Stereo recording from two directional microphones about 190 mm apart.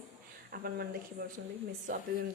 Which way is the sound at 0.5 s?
50° right (ahead or behind).